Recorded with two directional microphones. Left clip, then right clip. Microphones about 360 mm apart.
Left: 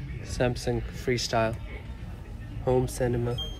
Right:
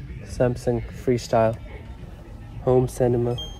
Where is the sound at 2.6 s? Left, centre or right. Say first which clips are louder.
Right 6 dB; centre.